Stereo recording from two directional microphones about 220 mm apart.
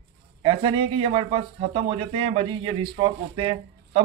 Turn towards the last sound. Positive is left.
turn(degrees=-25)  # may be behind; listen again after turning